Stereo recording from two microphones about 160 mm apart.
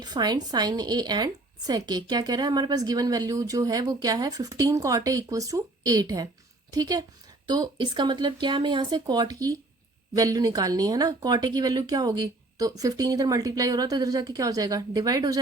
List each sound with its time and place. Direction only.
0.0 s a woman's voice: 25° right (ahead or behind)